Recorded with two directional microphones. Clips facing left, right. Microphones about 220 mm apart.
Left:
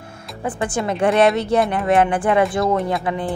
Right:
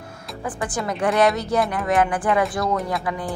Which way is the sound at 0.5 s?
25° left (ahead or behind).